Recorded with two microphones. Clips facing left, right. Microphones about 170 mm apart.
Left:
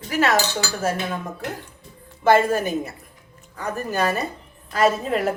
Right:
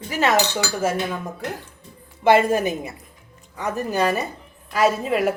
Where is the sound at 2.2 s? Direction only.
15° right (ahead or behind).